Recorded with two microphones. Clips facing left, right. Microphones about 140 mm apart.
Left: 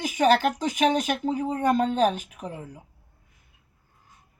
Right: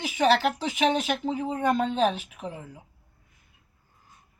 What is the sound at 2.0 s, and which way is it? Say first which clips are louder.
Speech: left 2 dB; 45° left (ahead or behind).